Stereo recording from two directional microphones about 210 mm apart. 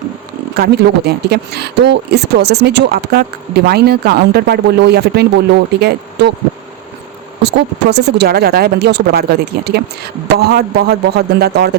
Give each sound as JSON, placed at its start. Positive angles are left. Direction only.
{"t": 0.5, "sound": "speech", "side_deg": -50}
{"t": 7.4, "sound": "speech", "side_deg": -50}